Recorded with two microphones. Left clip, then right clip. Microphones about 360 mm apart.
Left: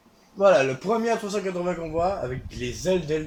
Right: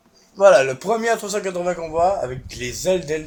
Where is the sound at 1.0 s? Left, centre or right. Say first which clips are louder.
Right 4 dB; right.